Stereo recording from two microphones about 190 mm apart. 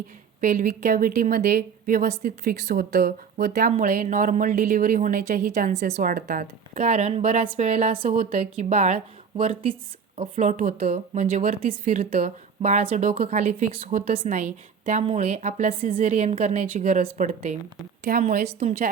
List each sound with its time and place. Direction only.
0.4 s a woman's voice: 40° right (ahead or behind); by 3.7 s 60° right (ahead or behind)
3.7 s a woman's voice: 40° right (ahead or behind)
6.7 s a woman's voice: 35° right (ahead or behind)
13.5 s a woman's voice: 45° right (ahead or behind)